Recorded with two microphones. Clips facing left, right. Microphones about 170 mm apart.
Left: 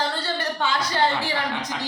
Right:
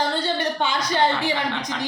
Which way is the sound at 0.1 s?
20° right (ahead or behind).